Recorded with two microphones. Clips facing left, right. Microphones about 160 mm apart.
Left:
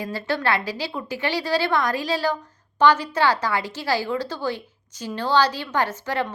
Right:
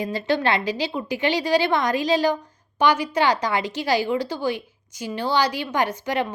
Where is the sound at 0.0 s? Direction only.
20° right (ahead or behind).